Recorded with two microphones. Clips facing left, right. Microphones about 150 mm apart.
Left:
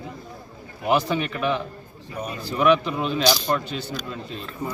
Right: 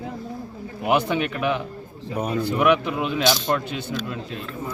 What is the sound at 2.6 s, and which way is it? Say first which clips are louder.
Speech: left 2 dB; 10° right (ahead or behind).